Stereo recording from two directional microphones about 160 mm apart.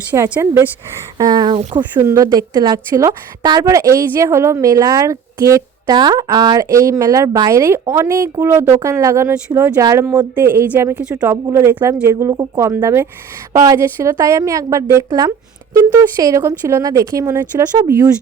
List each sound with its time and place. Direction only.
0.1 s speech: 10° right (ahead or behind)
1.2 s a woman's voice: 25° right (ahead or behind)
1.8 s a woman's voice: 15° right (ahead or behind)